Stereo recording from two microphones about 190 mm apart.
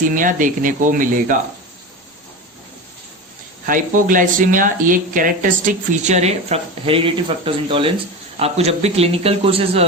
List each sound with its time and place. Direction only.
0.0 s speech: 45° right (ahead or behind)
3.7 s a man's voice: 45° right (ahead or behind)